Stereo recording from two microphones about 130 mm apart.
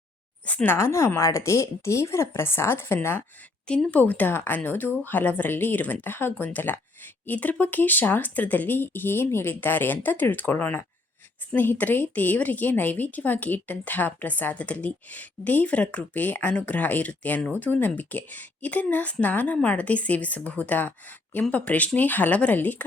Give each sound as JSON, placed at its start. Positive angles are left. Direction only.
{"t": 0.4, "sound": "a woman's voice", "side_deg": 10}